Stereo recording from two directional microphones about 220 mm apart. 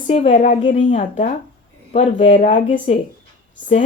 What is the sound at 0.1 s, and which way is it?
Speech, 35° left (ahead or behind).